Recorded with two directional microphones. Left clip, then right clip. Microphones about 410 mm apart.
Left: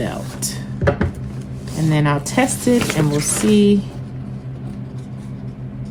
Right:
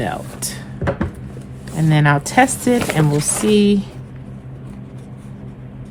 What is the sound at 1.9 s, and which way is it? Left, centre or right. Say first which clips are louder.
Speech: right 4 dB; centre.